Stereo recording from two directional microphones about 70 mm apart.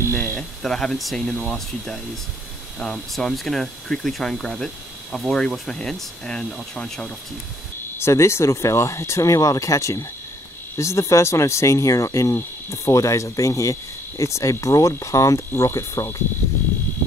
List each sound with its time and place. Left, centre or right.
0.1 s a sound: left
0.4 s speech: centre
8.0 s speech: left